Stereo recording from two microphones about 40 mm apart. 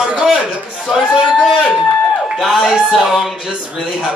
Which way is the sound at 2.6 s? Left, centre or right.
Centre.